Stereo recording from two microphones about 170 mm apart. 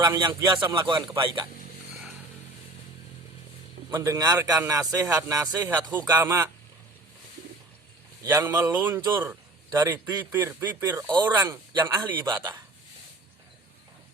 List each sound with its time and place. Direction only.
0.0 s a man's voice: 20° right (ahead or behind)
3.9 s speech: 15° right (ahead or behind)
8.2 s speech: 15° right (ahead or behind)
11.1 s speech: 25° right (ahead or behind)